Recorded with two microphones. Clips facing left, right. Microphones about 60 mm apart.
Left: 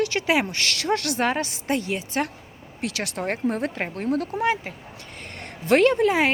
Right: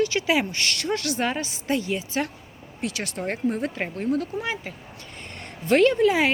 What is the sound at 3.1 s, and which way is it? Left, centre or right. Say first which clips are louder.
Speech: left 1 dB; left.